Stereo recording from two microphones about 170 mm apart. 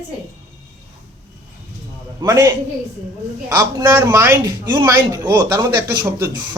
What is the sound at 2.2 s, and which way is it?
Speech, 20° right (ahead or behind).